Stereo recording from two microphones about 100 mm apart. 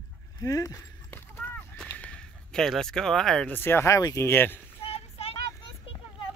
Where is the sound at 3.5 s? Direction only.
25° left (ahead or behind).